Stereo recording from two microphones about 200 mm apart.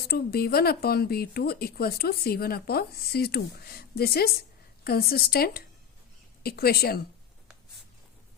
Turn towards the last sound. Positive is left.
turn(degrees=50)  # may be behind; listen again after turning